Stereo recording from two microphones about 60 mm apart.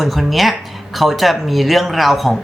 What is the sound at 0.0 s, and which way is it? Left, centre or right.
Speech, centre.